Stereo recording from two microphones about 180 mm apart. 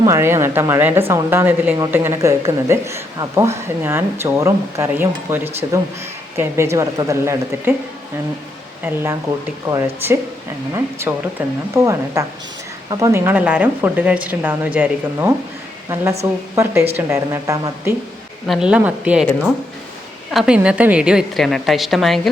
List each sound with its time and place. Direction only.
0.0 s speech: 15° right (ahead or behind)
9.6 s speech: 15° right (ahead or behind)
18.4 s a woman's voice: centre (ahead or behind)
20.3 s a woman's voice: 5° right (ahead or behind)